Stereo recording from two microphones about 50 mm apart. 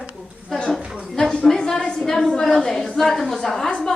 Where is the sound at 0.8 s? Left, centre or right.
Centre.